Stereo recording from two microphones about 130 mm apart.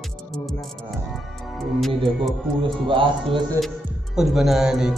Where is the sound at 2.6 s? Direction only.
40° right (ahead or behind).